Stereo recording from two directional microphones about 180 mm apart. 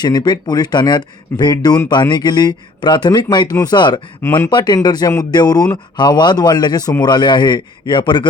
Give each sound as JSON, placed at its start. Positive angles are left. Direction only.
{"t": 0.0, "sound": "speech", "side_deg": 20}